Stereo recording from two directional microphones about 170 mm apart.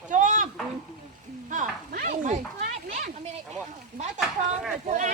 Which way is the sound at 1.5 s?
55° right (ahead or behind).